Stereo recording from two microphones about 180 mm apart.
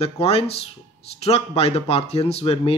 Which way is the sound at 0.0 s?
35° left (ahead or behind).